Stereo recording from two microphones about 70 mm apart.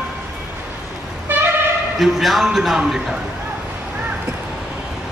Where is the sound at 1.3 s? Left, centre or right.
Right.